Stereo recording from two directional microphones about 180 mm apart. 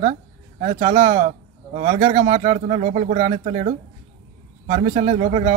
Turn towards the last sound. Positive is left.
turn(degrees=-50)  # may be behind; listen again after turning